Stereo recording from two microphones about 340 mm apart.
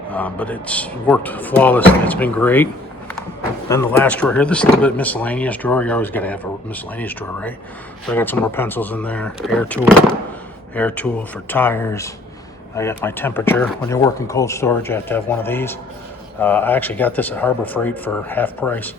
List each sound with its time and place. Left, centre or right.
0.1 s speech: centre
3.7 s speech: centre